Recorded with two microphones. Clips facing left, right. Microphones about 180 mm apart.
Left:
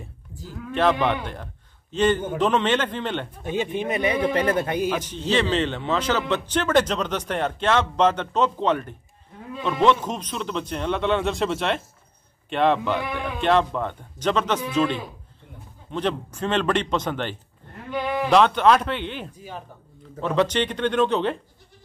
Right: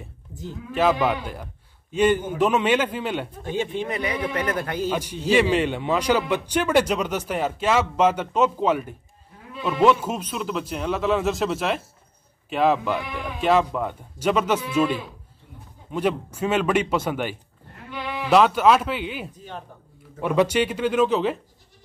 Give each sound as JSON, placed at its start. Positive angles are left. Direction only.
{"t": 0.3, "sound": "speech", "side_deg": -20}
{"t": 0.7, "sound": "a man's voice", "side_deg": -5}
{"t": 3.4, "sound": "a man's voice", "side_deg": 20}
{"t": 4.9, "sound": "a man's voice", "side_deg": -10}
{"t": 17.9, "sound": "sheep", "side_deg": 45}
{"t": 18.3, "sound": "a man's voice", "side_deg": -5}
{"t": 19.3, "sound": "speech", "side_deg": 5}
{"t": 20.2, "sound": "a man's voice", "side_deg": -10}